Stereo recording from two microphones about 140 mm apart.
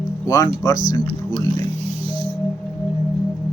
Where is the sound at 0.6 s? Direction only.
25° left (ahead or behind).